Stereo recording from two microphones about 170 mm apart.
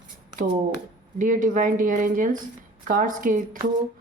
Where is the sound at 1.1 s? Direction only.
50° right (ahead or behind).